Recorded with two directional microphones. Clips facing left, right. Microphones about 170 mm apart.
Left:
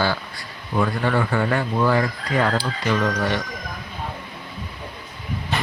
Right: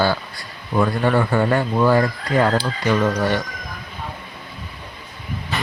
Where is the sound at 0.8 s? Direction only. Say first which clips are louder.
Right 3 dB; 30° right (ahead or behind).